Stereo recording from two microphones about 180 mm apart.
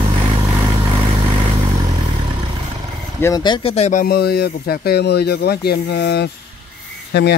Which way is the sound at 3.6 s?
35° left (ahead or behind).